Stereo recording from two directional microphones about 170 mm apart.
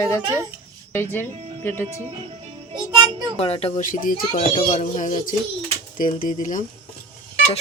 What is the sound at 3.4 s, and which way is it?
Speech, 35° left (ahead or behind).